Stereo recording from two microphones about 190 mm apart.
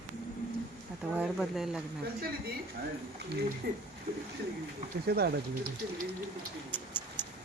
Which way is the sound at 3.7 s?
50° right (ahead or behind).